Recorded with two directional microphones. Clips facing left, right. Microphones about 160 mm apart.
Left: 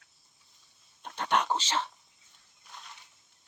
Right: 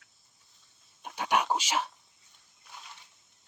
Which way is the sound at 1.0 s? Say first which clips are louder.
Even; 10° right (ahead or behind).